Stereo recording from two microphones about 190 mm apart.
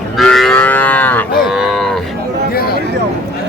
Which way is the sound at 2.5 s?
55° left (ahead or behind).